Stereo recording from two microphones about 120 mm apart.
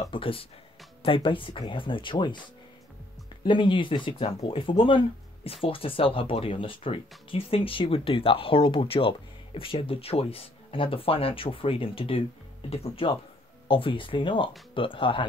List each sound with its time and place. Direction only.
0.1 s speech: 50° left (ahead or behind)
3.4 s speech: 45° left (ahead or behind)